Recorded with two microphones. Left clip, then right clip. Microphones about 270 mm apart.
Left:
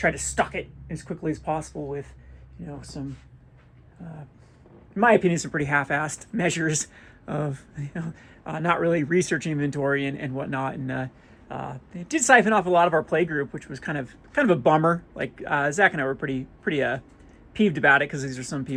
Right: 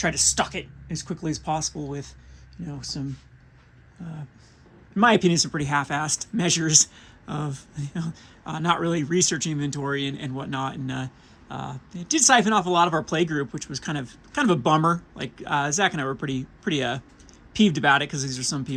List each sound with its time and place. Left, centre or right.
0.0 s speech: centre
2.6 s speech: right
4.9 s speech: right
5.3 s speech: centre
11.5 s speech: right
11.9 s speech: centre